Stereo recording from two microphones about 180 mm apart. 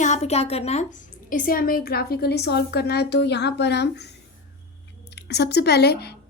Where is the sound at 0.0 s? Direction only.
40° left (ahead or behind); by 4.1 s 70° left (ahead or behind).